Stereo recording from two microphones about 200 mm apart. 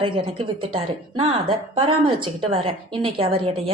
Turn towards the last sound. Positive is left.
turn(degrees=-30)  # may be behind; listen again after turning